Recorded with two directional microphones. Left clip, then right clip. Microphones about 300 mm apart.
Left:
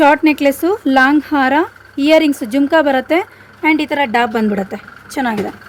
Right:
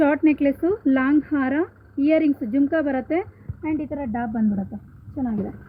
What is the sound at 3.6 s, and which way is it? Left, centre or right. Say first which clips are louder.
Speech: left 13 dB; left.